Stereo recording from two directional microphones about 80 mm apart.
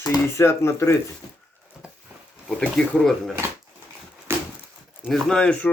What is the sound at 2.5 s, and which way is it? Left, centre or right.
Speech, centre.